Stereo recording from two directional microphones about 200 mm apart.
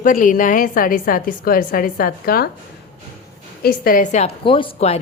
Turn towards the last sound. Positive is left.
turn(degrees=30)  # may be behind; listen again after turning